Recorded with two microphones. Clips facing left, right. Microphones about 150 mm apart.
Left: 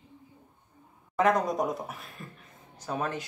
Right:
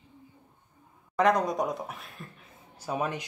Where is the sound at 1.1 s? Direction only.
Centre (ahead or behind).